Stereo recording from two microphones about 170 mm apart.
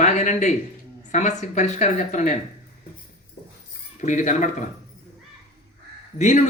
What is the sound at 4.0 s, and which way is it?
Speech, 45° left (ahead or behind).